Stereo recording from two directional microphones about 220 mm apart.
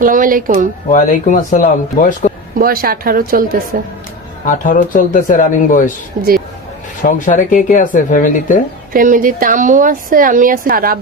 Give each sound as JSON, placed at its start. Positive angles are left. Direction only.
{"t": 0.0, "sound": "a woman's voice", "side_deg": -40}
{"t": 0.9, "sound": "speech", "side_deg": 35}
{"t": 2.6, "sound": "a woman's voice", "side_deg": -40}
{"t": 4.4, "sound": "speech", "side_deg": 35}
{"t": 6.2, "sound": "a woman's voice", "side_deg": -40}
{"t": 7.0, "sound": "speech", "side_deg": 35}
{"t": 8.9, "sound": "a woman's voice", "side_deg": -40}